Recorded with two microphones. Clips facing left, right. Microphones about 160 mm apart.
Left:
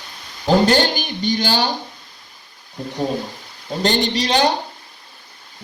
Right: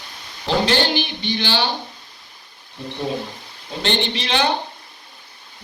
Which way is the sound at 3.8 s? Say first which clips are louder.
Left 4 dB; 40° left (ahead or behind).